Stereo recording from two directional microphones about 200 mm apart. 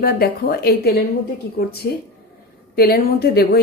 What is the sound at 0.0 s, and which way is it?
Speech, 50° left (ahead or behind).